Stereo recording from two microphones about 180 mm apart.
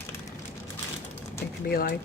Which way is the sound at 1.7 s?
55° left (ahead or behind).